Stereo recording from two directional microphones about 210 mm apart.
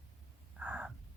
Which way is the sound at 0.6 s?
5° right (ahead or behind).